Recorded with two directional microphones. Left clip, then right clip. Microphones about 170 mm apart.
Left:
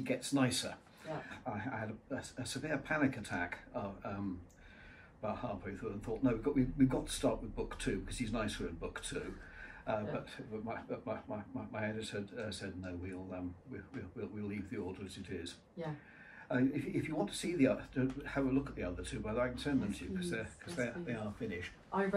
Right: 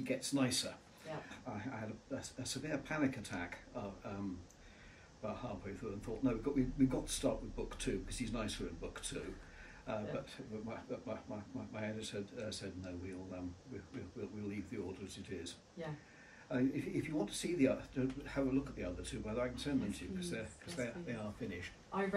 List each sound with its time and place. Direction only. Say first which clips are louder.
0.0 s speech: left 3 dB; 10° right (ahead or behind)
5.2 s speech: left 4 dB; 10° right (ahead or behind)
14.4 s speech: left 2 dB; 10° right (ahead or behind)